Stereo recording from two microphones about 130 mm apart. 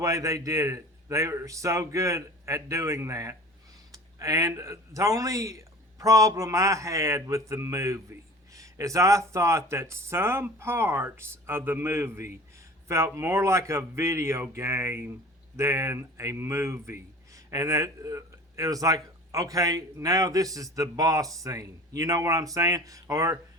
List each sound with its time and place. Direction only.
0.0 s speech: 25° right (ahead or behind)